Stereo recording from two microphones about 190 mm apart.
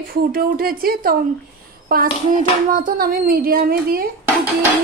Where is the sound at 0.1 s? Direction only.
50° right (ahead or behind).